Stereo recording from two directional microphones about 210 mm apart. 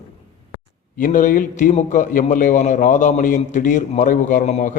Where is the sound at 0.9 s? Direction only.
40° left (ahead or behind).